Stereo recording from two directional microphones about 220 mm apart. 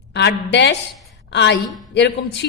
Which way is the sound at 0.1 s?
50° left (ahead or behind).